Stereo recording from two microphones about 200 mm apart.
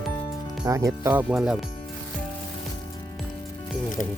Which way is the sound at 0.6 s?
15° right (ahead or behind).